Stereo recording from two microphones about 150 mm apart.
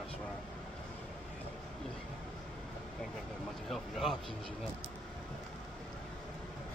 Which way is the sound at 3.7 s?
Centre (ahead or behind).